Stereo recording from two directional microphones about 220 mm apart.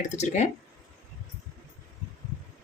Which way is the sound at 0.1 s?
30° left (ahead or behind).